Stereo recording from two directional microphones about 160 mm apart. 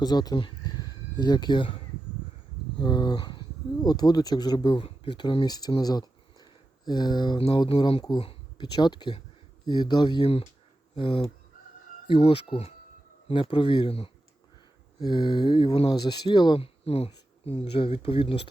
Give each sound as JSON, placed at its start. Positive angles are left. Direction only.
{"t": 0.0, "sound": "speech", "side_deg": 25}
{"t": 2.7, "sound": "speech", "side_deg": 25}